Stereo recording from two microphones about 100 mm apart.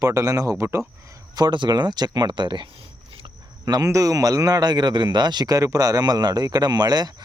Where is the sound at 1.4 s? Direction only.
50° right (ahead or behind).